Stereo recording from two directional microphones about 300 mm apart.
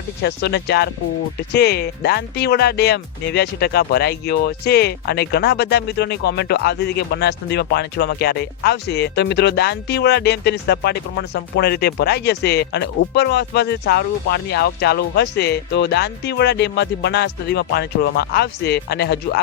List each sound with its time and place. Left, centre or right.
0.2 s speech: left